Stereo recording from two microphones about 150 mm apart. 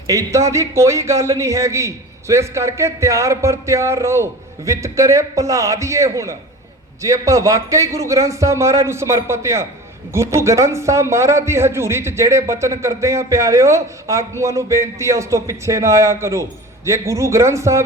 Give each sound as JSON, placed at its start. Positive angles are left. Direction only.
{"t": 0.1, "sound": "a man's voice", "side_deg": -20}